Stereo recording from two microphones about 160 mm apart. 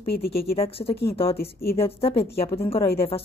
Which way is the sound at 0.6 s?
35° left (ahead or behind).